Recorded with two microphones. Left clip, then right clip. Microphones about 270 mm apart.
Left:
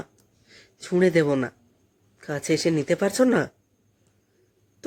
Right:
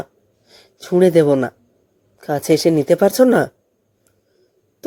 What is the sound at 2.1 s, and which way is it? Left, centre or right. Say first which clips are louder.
A woman's voice: right 9 dB; centre.